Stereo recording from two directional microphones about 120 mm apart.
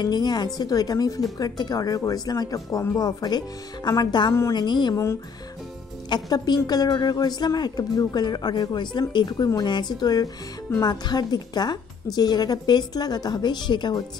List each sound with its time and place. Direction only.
0.0 s speech: 35° left (ahead or behind)
6.0 s speech: 35° left (ahead or behind)